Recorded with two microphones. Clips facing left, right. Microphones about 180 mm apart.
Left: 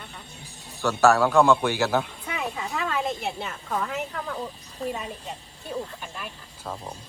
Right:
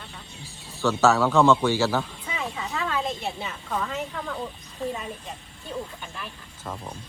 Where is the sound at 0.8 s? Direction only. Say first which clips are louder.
Left 1 dB; 15° left (ahead or behind).